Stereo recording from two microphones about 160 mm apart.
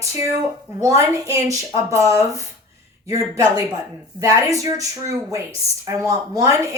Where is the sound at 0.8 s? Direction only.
20° right (ahead or behind).